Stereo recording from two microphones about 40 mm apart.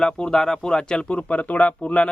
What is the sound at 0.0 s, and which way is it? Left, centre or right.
Speech, centre.